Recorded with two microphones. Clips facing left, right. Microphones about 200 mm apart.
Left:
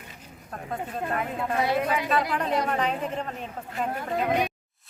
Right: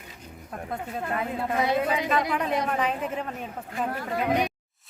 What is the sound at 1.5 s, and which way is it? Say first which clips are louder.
A woman's voice: even; 20° right (ahead or behind).